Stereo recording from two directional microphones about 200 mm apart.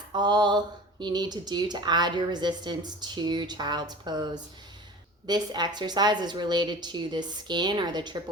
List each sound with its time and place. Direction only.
0.1 s speech: 20° right (ahead or behind)